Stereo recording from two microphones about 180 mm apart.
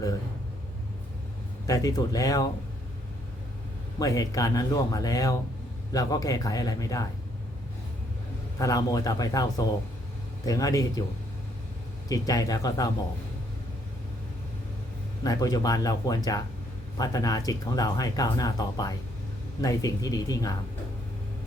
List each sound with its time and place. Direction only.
1.6 s speech: 20° left (ahead or behind)
3.9 s speech: 20° left (ahead or behind)
8.5 s speech: 20° left (ahead or behind)
12.0 s speech: 20° left (ahead or behind)
15.2 s speech: 20° left (ahead or behind)